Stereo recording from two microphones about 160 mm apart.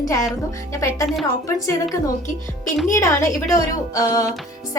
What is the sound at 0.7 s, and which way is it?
Speech, 20° left (ahead or behind).